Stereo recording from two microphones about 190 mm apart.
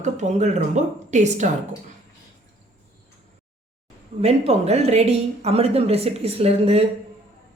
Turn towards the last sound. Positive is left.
turn(degrees=-30)  # may be behind; listen again after turning